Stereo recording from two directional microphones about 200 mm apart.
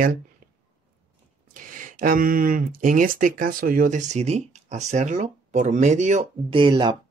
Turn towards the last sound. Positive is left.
turn(degrees=-25)  # may be behind; listen again after turning